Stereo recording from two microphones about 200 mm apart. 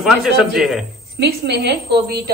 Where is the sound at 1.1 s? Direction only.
55° right (ahead or behind).